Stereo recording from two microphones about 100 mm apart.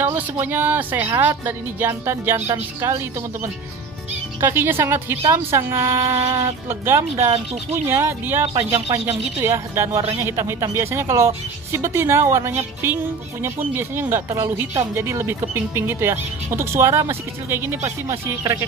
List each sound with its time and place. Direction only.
0.0 s speech: 20° right (ahead or behind)
4.4 s speech: 25° right (ahead or behind)